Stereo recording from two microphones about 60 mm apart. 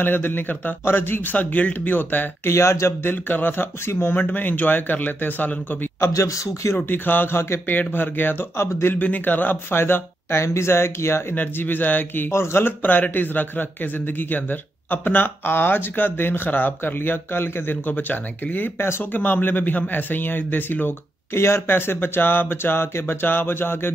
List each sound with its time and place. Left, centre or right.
0.0 s a man's voice: left
2.5 s speech: left
3.1 s a man's voice: left
3.8 s speech: left
4.1 s speech: left
6.1 s speech: left
6.9 s a man's voice: left
7.7 s a man's voice: left
9.0 s a man's voice: left
11.3 s a man's voice: left
12.3 s a man's voice: left